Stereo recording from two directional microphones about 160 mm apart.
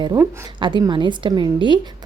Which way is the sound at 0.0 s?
25° right (ahead or behind).